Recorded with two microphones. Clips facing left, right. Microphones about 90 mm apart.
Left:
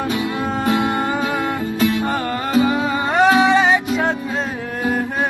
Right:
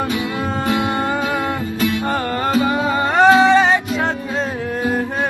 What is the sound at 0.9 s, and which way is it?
Music, 5° left (ahead or behind).